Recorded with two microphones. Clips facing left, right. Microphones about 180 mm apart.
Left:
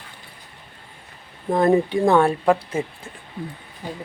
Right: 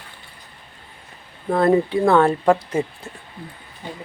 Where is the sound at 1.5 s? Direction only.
20° left (ahead or behind).